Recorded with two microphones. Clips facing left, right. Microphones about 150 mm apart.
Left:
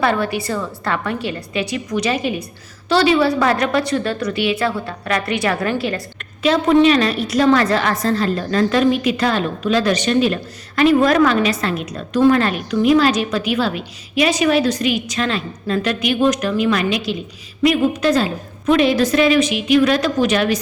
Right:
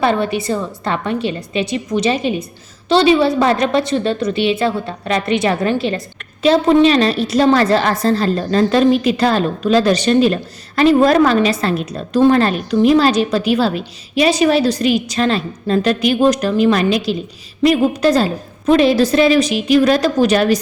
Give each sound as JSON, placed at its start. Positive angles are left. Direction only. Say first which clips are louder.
{"t": 0.0, "sound": "a woman's voice", "louder": "right 2 dB", "side_deg": -20}